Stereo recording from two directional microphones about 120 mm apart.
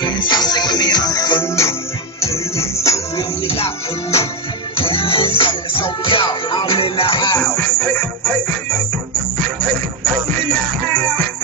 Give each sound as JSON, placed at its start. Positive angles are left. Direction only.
{"t": 0.0, "sound": "music", "side_deg": 40}
{"t": 3.4, "sound": "music", "side_deg": 55}
{"t": 7.3, "sound": "music", "side_deg": 10}